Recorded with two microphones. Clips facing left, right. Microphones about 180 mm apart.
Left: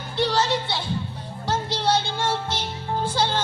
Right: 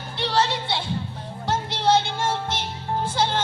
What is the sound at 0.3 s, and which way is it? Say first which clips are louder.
Speech: right 4 dB; 25° right (ahead or behind).